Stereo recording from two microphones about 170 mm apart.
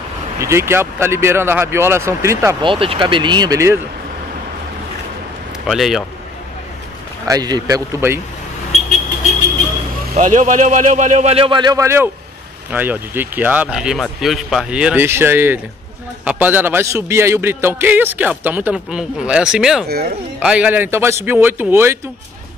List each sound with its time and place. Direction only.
0.4 s a man's voice: 15° right (ahead or behind)
2.6 s speech: 30° right (ahead or behind)
5.7 s a man's voice: centre (ahead or behind)
7.2 s speech: 25° right (ahead or behind)
10.1 s a man's voice: 45° right (ahead or behind); by 21.9 s 15° right (ahead or behind)